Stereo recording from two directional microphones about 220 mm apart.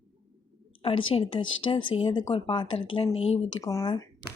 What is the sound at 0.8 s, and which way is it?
A woman's voice, 25° left (ahead or behind).